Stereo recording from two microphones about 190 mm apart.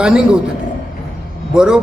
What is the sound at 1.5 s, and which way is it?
Speech, 5° right (ahead or behind).